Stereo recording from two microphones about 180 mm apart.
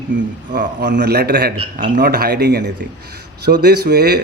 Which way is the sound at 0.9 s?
65° right (ahead or behind).